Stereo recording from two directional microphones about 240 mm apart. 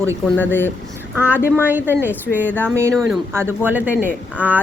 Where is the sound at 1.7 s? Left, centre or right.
Centre.